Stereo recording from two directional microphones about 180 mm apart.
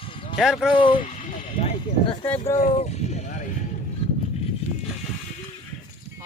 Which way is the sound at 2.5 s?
40° left (ahead or behind).